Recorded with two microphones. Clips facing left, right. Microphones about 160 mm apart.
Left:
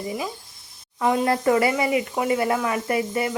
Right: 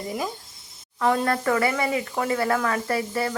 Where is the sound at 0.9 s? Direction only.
15° left (ahead or behind).